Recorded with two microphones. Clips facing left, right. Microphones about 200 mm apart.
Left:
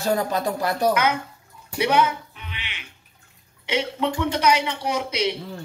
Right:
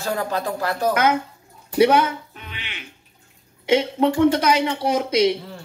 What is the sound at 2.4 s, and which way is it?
Music, 45° right (ahead or behind).